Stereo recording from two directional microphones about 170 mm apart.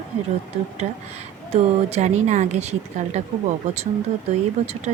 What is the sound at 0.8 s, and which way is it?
Speech, 40° right (ahead or behind).